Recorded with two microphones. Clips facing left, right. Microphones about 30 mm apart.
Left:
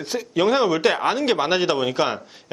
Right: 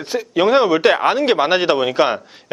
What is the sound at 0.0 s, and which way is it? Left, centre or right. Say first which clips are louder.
Speech: right 4 dB; centre.